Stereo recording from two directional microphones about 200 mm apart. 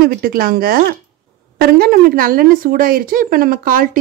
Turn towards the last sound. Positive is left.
turn(degrees=-45)  # may be behind; listen again after turning